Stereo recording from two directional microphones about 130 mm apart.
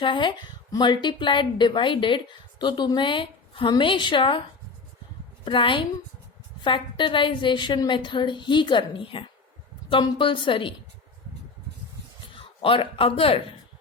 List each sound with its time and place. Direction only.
0.0 s a woman's voice: 40° left (ahead or behind)
5.5 s a woman's voice: 40° left (ahead or behind)
12.3 s a man's voice: 45° left (ahead or behind)